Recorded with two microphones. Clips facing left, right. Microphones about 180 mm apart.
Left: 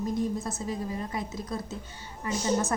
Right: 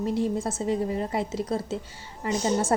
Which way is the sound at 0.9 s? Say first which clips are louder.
Right 6 dB; 25° right (ahead or behind).